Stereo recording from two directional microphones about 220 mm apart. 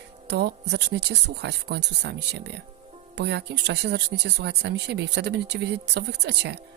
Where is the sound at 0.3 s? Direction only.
50° right (ahead or behind).